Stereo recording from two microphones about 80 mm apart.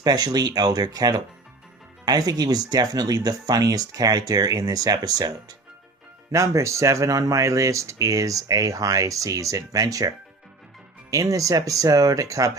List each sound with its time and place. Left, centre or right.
0.0 s speech: right
6.3 s speech: right